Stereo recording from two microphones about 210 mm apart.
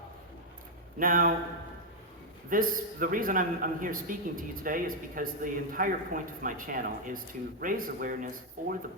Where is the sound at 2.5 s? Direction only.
40° right (ahead or behind).